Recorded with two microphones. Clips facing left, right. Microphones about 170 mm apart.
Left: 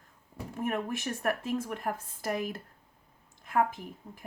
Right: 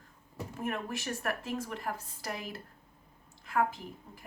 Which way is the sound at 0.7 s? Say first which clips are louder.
Left 4 dB; 50° left (ahead or behind).